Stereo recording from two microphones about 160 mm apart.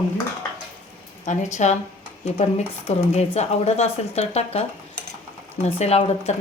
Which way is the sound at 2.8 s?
40° left (ahead or behind).